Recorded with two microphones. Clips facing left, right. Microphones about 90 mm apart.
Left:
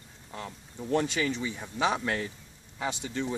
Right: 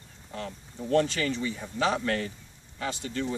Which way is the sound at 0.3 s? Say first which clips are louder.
Right 3 dB; 10° left (ahead or behind).